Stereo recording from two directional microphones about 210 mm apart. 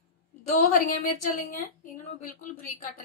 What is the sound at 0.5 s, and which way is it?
A woman's voice, 40° left (ahead or behind).